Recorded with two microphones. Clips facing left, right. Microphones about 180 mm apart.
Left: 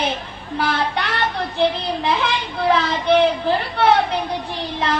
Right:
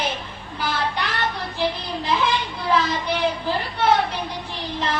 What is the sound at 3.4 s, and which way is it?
Speech, 65° left (ahead or behind).